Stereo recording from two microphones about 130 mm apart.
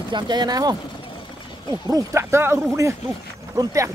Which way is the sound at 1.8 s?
25° right (ahead or behind).